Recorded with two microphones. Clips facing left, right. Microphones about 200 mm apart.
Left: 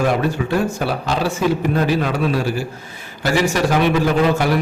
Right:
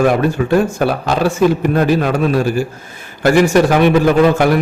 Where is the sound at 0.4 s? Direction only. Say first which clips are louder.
Right 6 dB; 55° right (ahead or behind).